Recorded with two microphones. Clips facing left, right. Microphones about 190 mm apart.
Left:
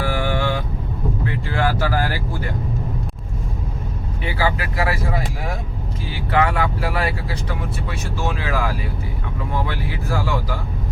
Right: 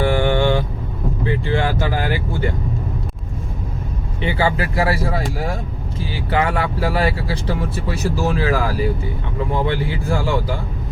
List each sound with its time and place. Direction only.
0.0 s vehicle: 25° right (ahead or behind)
4.2 s speech: 25° right (ahead or behind)
6.3 s speech: 30° right (ahead or behind)
9.6 s speech: 25° right (ahead or behind)